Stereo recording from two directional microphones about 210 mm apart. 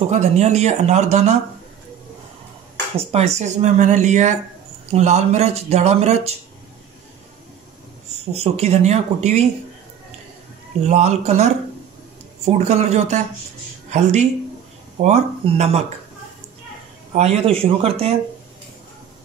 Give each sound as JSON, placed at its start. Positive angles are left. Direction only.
{"t": 0.1, "sound": "speech", "side_deg": -30}
{"t": 3.0, "sound": "speech", "side_deg": -30}
{"t": 8.3, "sound": "speech", "side_deg": -30}
{"t": 10.8, "sound": "speech", "side_deg": -35}
{"t": 17.1, "sound": "speech", "side_deg": -30}